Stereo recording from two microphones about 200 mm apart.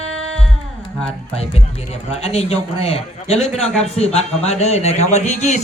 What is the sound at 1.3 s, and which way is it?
Music, 30° left (ahead or behind).